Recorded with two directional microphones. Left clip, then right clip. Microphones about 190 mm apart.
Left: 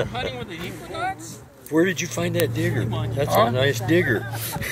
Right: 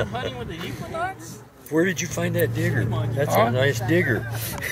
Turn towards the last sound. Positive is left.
turn(degrees=0)  # may be behind; listen again after turning